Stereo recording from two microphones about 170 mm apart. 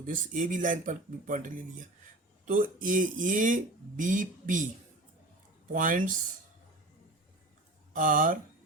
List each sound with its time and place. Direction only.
0.0 s speech: 50° right (ahead or behind)
5.7 s speech: 50° right (ahead or behind)
7.9 s speech: 50° right (ahead or behind)